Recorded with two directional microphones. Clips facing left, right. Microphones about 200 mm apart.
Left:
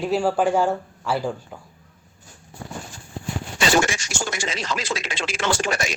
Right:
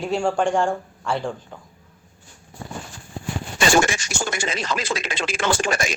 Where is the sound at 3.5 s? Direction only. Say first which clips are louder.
Right 2 dB; 50° right (ahead or behind).